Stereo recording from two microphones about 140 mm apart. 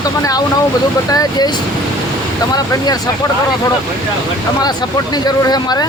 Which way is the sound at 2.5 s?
30° left (ahead or behind).